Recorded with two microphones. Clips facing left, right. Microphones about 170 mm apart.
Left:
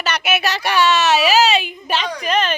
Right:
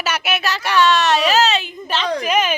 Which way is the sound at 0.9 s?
5° left (ahead or behind).